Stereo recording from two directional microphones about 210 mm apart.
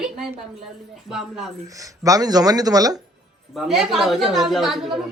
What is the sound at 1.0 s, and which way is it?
Speech, centre (ahead or behind).